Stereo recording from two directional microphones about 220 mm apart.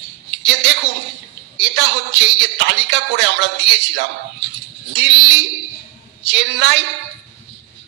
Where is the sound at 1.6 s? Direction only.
55° right (ahead or behind).